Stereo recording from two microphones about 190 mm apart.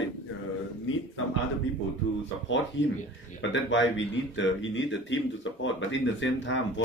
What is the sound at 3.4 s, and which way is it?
A man's voice, 70° left (ahead or behind).